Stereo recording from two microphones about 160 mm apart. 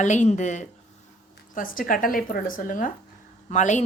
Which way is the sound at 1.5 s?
60° left (ahead or behind).